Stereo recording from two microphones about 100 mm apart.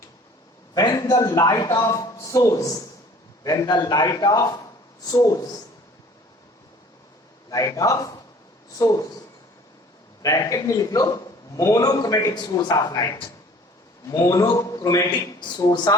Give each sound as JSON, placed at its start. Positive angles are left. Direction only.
{"t": 0.7, "sound": "a man's voice", "side_deg": 40}
{"t": 7.5, "sound": "a man's voice", "side_deg": 35}
{"t": 10.2, "sound": "a man's voice", "side_deg": 35}